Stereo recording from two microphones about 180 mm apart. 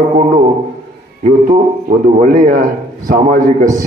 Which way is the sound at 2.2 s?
50° right (ahead or behind).